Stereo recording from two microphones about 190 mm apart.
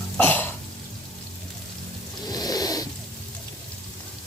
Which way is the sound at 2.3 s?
20° left (ahead or behind).